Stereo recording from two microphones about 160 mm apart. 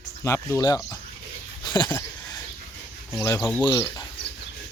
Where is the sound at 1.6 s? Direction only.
25° left (ahead or behind).